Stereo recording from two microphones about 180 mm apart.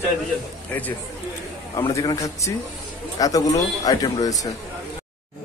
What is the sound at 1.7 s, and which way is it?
Speech, 20° left (ahead or behind).